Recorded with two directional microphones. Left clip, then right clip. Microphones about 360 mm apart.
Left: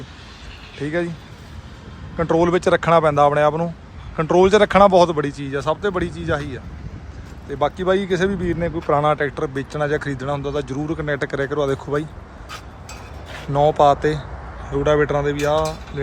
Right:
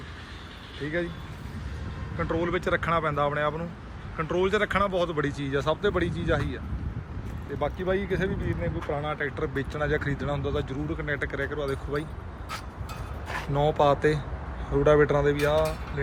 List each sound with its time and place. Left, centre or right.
2.1 s a man's voice: centre
7.6 s speech: centre
13.5 s a man's voice: centre